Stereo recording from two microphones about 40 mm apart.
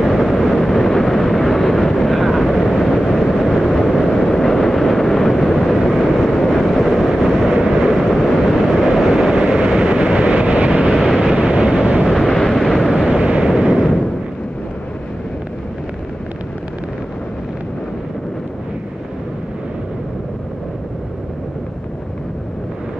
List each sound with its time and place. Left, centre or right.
0.0 s vehicle: centre
8.0 s vehicle: centre
8.5 s vehicle: centre
9.3 s vehicle: right
10.8 s vehicle: centre
11.3 s vehicle: centre
12.1 s vehicle: centre
13.1 s vehicle: right
13.5 s artillery fire: centre